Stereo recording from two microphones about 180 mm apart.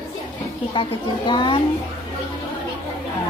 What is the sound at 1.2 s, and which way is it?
Speech, 25° left (ahead or behind).